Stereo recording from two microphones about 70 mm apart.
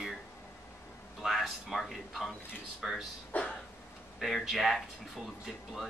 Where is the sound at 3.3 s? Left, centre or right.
Left.